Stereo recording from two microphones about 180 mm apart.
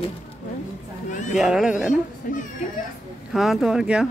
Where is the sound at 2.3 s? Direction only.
45° left (ahead or behind).